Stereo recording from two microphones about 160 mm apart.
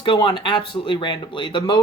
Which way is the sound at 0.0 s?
30° left (ahead or behind).